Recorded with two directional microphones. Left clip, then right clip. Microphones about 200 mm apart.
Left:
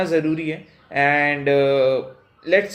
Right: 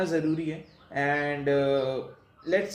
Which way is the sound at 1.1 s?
30° left (ahead or behind).